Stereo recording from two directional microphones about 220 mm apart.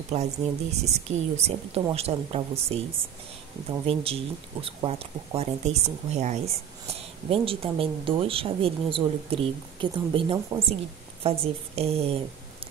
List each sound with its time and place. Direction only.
0.1 s speech: 30° right (ahead or behind)
3.6 s speech: 25° right (ahead or behind)